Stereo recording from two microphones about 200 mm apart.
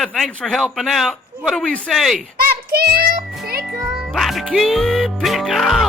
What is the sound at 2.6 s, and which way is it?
Child singing, 50° right (ahead or behind).